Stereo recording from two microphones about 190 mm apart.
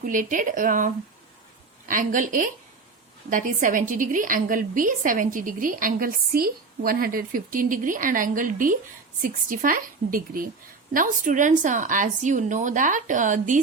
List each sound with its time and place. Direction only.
0.0 s a woman's voice: 45° right (ahead or behind)
1.9 s a woman's voice: 45° right (ahead or behind)